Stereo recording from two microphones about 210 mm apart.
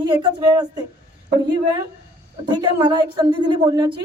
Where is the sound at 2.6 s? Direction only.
20° right (ahead or behind).